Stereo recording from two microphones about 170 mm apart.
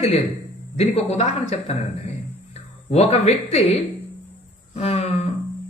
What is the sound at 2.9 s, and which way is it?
Speech, 40° left (ahead or behind).